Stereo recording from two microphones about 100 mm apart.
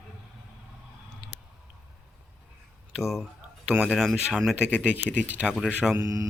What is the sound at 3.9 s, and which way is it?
Speech, centre (ahead or behind).